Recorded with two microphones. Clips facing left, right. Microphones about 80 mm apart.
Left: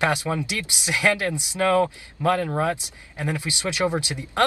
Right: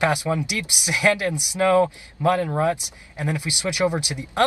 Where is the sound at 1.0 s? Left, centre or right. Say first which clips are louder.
Right 2 dB; left.